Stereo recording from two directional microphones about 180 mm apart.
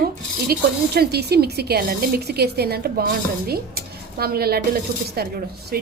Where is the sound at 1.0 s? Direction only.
60° right (ahead or behind).